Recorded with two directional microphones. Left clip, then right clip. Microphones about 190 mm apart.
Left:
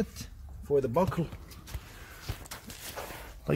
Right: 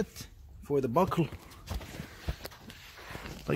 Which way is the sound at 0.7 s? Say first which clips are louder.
Even; 55° right (ahead or behind).